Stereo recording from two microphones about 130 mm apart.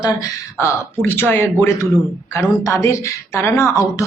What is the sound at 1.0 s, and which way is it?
A woman's voice, 15° left (ahead or behind).